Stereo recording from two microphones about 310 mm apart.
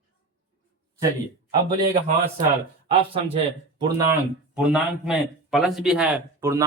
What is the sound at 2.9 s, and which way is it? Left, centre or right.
Speech, centre.